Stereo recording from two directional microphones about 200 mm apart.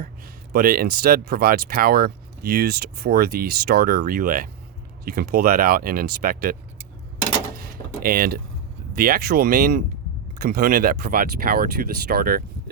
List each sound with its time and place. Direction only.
0.5 s speech: 45° right (ahead or behind)
8.0 s speech: 45° right (ahead or behind)